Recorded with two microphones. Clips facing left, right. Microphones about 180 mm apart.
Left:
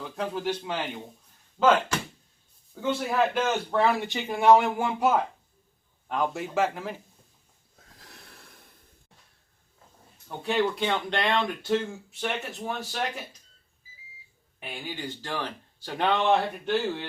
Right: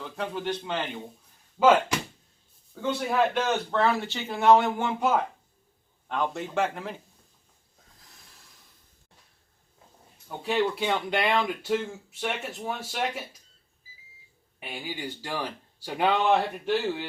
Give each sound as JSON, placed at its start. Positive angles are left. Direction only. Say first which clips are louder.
{"t": 0.0, "sound": "a man's voice", "louder": "left 1 dB", "side_deg": 0}
{"t": 1.5, "sound": "speech", "louder": "right 2 dB", "side_deg": -10}
{"t": 2.7, "sound": "a man's voice", "louder": "even", "side_deg": 0}
{"t": 7.9, "sound": "a sound", "louder": "left 7 dB", "side_deg": 75}
{"t": 10.2, "sound": "speech", "louder": "even", "side_deg": -5}
{"t": 14.6, "sound": "speech", "louder": "right 1 dB", "side_deg": -10}